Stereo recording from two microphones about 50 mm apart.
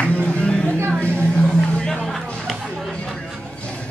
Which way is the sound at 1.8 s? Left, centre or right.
Centre.